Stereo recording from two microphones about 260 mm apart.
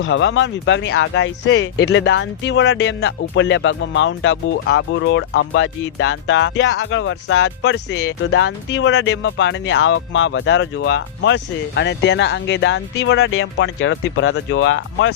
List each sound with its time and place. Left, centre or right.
0.0 s speech: left